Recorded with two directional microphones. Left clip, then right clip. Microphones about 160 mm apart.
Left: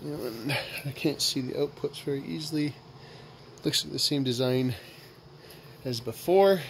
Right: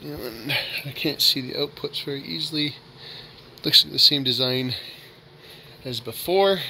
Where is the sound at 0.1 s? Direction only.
10° left (ahead or behind).